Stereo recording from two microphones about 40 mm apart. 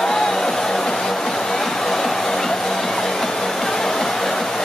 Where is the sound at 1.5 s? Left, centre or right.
Centre.